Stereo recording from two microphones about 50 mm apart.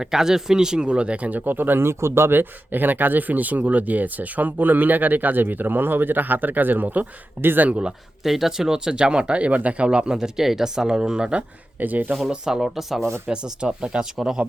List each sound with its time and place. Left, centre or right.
0.0 s speech: centre; by 1.4 s right
1.5 s speech: right
2.4 s speech: right
7.7 s speech: centre
8.2 s speech: centre
11.8 s speech: right
12.3 s speech: centre
13.2 s speech: centre